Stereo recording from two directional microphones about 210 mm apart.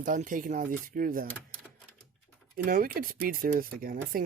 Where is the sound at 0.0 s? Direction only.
40° right (ahead or behind).